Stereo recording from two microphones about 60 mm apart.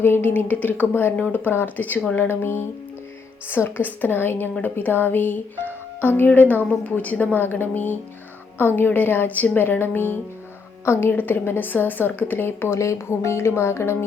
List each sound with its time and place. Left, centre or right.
0.0 s a woman's voice: left
11.1 s a woman's voice: left